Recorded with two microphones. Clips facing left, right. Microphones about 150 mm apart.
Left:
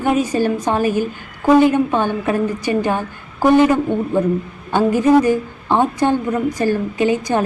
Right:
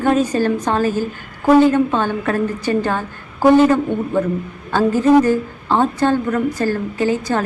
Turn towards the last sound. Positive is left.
turn(degrees=15)  # may be behind; listen again after turning